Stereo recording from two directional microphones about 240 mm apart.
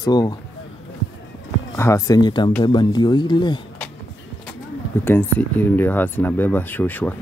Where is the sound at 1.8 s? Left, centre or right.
Centre.